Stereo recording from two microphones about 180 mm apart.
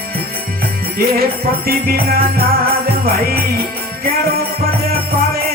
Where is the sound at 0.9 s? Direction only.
55° right (ahead or behind).